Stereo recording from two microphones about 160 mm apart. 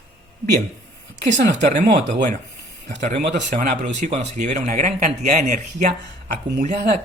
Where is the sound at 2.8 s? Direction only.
50° right (ahead or behind).